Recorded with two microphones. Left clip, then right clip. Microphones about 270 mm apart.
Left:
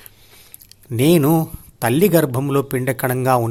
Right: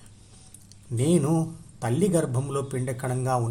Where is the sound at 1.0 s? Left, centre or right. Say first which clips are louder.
Left 9 dB; left.